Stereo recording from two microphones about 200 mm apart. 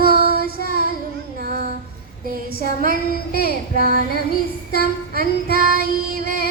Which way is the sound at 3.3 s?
50° left (ahead or behind).